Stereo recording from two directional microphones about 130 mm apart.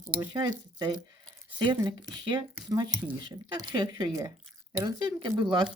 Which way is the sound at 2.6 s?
30° right (ahead or behind).